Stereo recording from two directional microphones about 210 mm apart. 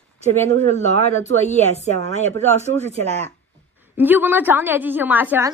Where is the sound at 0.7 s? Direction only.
35° left (ahead or behind).